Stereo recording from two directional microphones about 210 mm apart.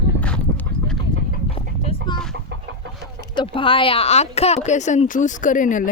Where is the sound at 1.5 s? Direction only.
25° left (ahead or behind).